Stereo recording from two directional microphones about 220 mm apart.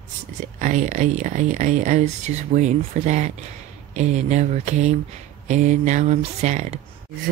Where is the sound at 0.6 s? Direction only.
35° right (ahead or behind).